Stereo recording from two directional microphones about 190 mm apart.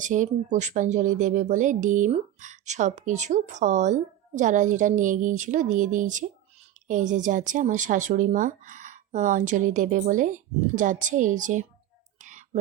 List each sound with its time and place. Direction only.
0.0 s speech: 40° right (ahead or behind)
12.2 s whispering: 40° right (ahead or behind)